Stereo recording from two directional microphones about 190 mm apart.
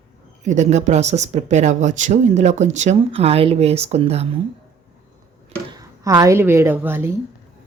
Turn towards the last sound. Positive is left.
turn(degrees=-10)  # may be behind; listen again after turning